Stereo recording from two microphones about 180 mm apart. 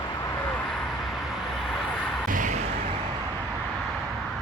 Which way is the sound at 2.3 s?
45° right (ahead or behind).